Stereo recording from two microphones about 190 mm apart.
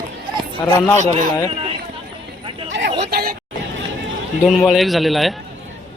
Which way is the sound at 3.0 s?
55° right (ahead or behind).